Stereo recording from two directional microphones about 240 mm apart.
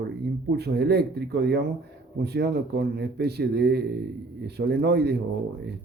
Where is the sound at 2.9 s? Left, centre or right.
Right.